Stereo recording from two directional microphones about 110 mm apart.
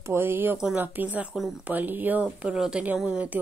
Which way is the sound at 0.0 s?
20° right (ahead or behind).